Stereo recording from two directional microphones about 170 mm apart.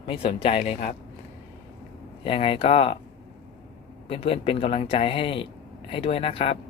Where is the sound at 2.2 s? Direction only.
35° left (ahead or behind).